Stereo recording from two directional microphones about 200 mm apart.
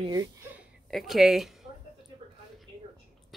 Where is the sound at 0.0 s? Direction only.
20° right (ahead or behind).